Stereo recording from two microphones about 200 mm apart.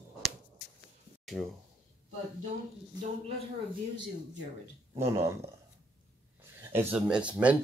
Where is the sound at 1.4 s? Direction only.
10° right (ahead or behind).